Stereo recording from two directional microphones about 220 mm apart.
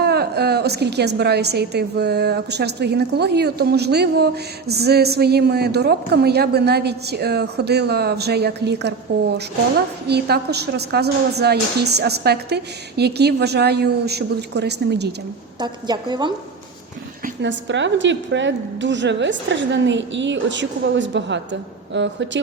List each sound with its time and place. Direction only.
0.0 s a woman's voice: 45° right (ahead or behind)
15.5 s a woman's voice: 20° right (ahead or behind)
17.7 s a woman's voice: 55° right (ahead or behind)